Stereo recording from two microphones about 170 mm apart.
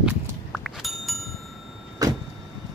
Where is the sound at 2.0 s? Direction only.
20° right (ahead or behind).